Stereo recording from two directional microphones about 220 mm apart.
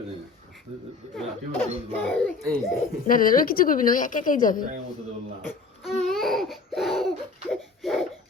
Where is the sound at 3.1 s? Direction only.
40° left (ahead or behind).